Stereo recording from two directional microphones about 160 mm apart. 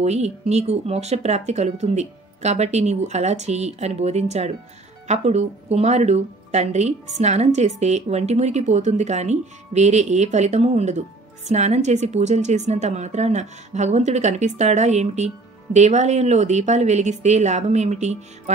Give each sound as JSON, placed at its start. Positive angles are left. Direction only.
{"t": 0.0, "sound": "a woman's voice", "side_deg": -45}